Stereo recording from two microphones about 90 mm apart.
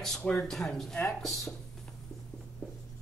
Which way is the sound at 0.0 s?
10° left (ahead or behind).